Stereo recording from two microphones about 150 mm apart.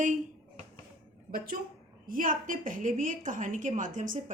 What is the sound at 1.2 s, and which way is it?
A woman's voice, 75° right (ahead or behind).